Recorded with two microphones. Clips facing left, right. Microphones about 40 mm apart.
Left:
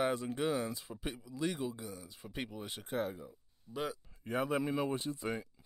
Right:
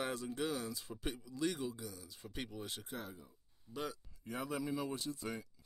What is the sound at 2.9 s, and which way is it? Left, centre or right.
Speech, left.